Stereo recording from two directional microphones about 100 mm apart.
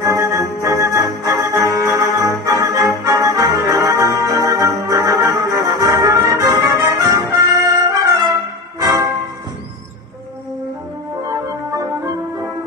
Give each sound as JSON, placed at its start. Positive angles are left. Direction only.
{"t": 0.0, "sound": "music", "side_deg": -30}
{"t": 5.0, "sound": "brass instrument", "side_deg": -35}
{"t": 7.6, "sound": "music", "side_deg": -35}
{"t": 11.2, "sound": "music", "side_deg": -35}